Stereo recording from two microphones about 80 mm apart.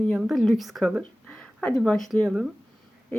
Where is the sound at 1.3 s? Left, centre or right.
Centre.